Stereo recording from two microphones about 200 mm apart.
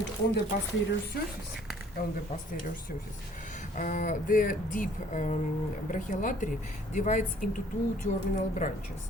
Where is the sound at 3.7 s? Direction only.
40° left (ahead or behind).